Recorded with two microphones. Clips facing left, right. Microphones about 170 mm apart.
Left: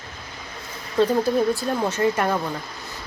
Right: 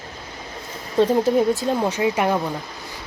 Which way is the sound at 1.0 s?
20° right (ahead or behind).